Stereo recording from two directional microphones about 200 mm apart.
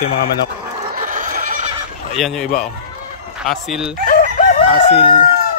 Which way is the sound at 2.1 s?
Centre (ahead or behind).